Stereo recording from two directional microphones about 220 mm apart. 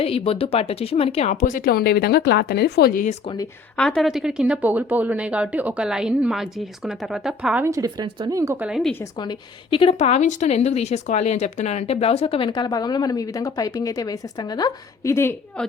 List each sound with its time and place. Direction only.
0.0 s speech: 25° left (ahead or behind)
3.8 s speech: 5° left (ahead or behind)
9.1 s speech: 20° left (ahead or behind)